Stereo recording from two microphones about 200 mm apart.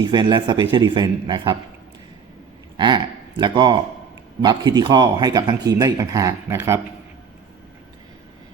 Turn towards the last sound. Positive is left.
turn(degrees=-15)  # may be behind; listen again after turning